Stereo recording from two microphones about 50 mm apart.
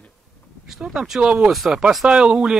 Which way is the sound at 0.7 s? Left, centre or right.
Centre.